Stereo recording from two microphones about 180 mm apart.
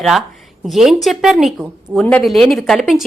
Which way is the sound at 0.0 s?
Centre (ahead or behind).